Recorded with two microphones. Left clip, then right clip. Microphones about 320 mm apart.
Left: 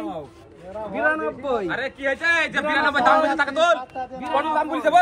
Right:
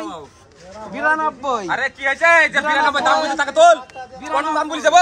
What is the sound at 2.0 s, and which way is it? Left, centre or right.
Speech, centre.